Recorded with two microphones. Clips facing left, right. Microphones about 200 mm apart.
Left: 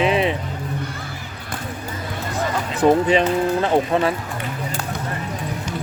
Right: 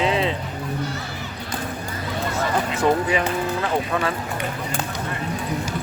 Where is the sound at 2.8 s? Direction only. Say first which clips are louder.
Left 7 dB; 20° left (ahead or behind).